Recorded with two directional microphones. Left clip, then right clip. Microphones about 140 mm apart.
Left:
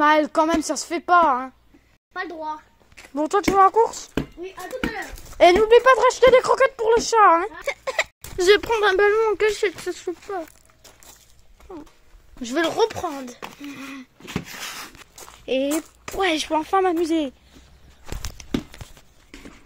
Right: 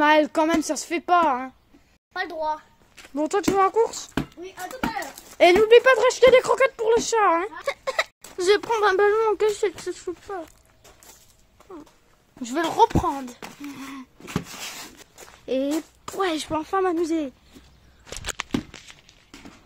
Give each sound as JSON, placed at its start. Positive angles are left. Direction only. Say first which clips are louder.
{"t": 0.0, "sound": "speech", "louder": "left 1 dB", "side_deg": -5}
{"t": 2.1, "sound": "a child's voice", "louder": "right 3 dB", "side_deg": -35}
{"t": 3.0, "sound": "speech", "louder": "left 3 dB", "side_deg": 0}
{"t": 4.6, "sound": "speech", "louder": "even", "side_deg": -30}
{"t": 5.4, "sound": "speech", "louder": "left 1 dB", "side_deg": -15}
{"t": 7.6, "sound": "a sound", "louder": "left 1 dB", "side_deg": 15}
{"t": 8.4, "sound": "speech", "louder": "left 4 dB", "side_deg": 15}
{"t": 8.6, "sound": "speech", "louder": "left 1 dB", "side_deg": 5}
{"t": 9.5, "sound": "speech", "louder": "left 2 dB", "side_deg": 10}
{"t": 12.4, "sound": "speech", "louder": "right 1 dB", "side_deg": 10}